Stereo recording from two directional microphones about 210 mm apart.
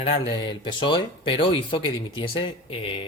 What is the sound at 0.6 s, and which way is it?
Speech, 20° left (ahead or behind).